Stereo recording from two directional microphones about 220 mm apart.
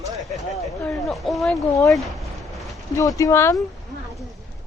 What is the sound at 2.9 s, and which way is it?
Speech, 15° left (ahead or behind).